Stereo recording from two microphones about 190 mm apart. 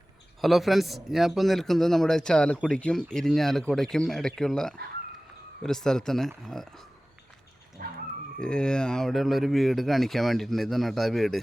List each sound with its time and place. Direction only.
0.4 s speech: centre (ahead or behind)
7.8 s dog: 50° right (ahead or behind)
8.4 s speech: 5° left (ahead or behind)